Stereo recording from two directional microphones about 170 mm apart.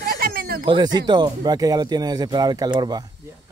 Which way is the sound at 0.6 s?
25° right (ahead or behind).